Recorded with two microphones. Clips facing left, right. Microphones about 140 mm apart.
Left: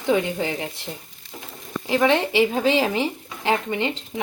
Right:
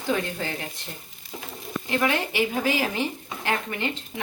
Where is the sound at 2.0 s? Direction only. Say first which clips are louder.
Left 8 dB; 25° left (ahead or behind).